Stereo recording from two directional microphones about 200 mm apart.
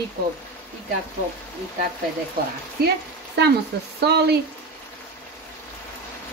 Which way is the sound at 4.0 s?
55° right (ahead or behind).